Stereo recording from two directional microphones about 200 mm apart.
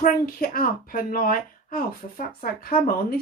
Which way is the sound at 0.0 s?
45° left (ahead or behind).